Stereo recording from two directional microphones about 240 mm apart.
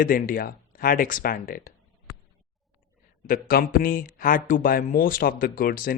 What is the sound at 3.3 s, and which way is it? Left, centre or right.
Speech, left.